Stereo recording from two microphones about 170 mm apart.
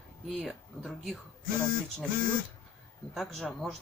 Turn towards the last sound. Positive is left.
turn(degrees=0)  # may be behind; listen again after turning